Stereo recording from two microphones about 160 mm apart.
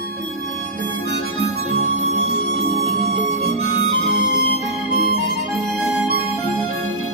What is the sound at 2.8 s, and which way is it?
Music, 40° right (ahead or behind).